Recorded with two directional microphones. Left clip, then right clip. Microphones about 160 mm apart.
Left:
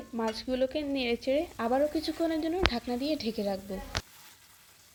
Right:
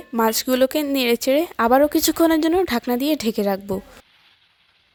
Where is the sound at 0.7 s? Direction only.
90° right.